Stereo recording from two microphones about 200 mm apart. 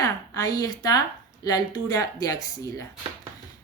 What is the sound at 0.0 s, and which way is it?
A woman's voice, 20° left (ahead or behind).